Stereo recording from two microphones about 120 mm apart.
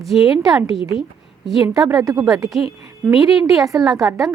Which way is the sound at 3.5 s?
Centre (ahead or behind).